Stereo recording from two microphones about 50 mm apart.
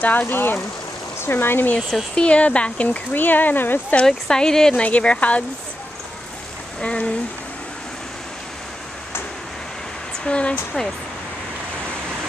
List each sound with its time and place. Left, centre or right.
0.0 s speech: left
2.1 s speech: left
3.2 s speech: left
4.0 s speech: centre
4.7 s speech: left
6.8 s speech: left
10.2 s speech: left